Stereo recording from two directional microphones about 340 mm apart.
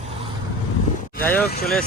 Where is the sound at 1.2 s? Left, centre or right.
Centre.